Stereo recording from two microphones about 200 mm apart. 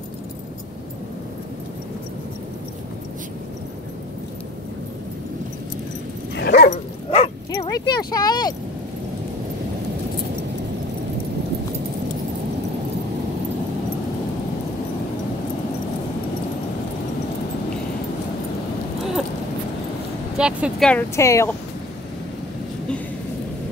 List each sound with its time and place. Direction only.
6.3 s dog: 55° left (ahead or behind)
6.7 s dog: 30° left (ahead or behind)
7.6 s speech: 20° left (ahead or behind)
20.3 s vehicle: 5° right (ahead or behind)
20.9 s speech: 15° left (ahead or behind)